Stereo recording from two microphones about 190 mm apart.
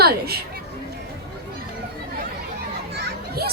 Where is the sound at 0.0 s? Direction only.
55° right (ahead or behind).